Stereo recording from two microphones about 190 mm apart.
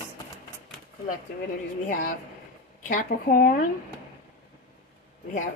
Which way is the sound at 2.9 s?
45° left (ahead or behind).